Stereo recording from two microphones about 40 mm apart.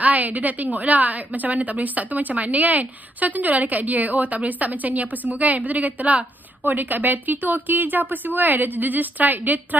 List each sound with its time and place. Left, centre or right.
0.0 s a woman's voice: right